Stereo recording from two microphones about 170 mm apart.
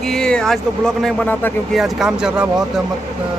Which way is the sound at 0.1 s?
5° left (ahead or behind).